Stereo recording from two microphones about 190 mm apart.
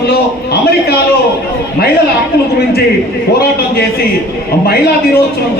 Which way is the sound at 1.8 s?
55° left (ahead or behind).